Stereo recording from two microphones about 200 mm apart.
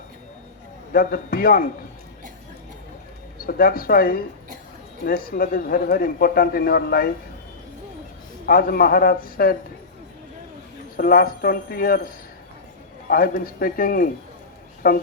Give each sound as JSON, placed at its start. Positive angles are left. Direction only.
{"t": 0.9, "sound": "a man's voice", "side_deg": 45}
{"t": 3.4, "sound": "a man's voice", "side_deg": 45}
{"t": 8.4, "sound": "a man's voice", "side_deg": 45}
{"t": 10.9, "sound": "a man's voice", "side_deg": 45}